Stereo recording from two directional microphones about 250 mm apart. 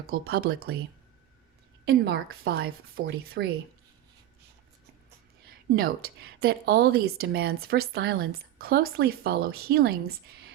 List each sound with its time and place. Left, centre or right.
0.1 s a woman's voice: right
1.9 s a woman's voice: right
5.5 s a woman's voice: right